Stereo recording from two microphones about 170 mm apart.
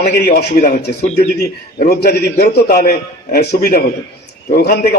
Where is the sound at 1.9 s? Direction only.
65° left (ahead or behind).